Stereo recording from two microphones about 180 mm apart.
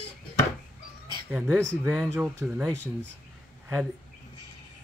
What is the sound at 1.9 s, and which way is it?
Speech, 5° right (ahead or behind).